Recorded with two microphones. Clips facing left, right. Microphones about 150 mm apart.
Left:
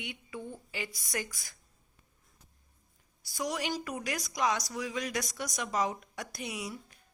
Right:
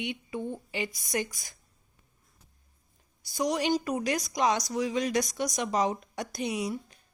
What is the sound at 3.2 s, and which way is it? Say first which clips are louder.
A woman's voice: right 7 dB; 20° right (ahead or behind).